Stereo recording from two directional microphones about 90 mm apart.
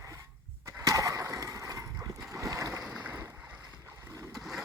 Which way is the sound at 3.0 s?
20° right (ahead or behind).